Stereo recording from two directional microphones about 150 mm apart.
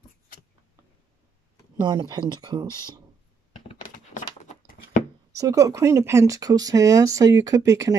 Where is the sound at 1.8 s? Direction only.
30° right (ahead or behind).